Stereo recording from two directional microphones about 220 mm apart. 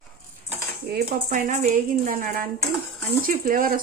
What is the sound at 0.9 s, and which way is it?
Speech, 35° right (ahead or behind).